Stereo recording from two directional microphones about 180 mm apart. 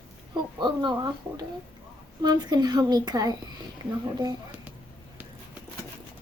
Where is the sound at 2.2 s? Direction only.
25° right (ahead or behind).